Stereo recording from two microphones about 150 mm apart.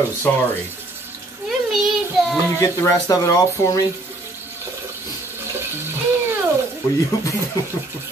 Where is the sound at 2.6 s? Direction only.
20° left (ahead or behind).